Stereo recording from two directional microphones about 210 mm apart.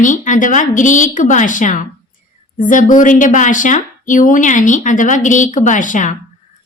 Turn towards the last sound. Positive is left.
turn(degrees=35)  # may be behind; listen again after turning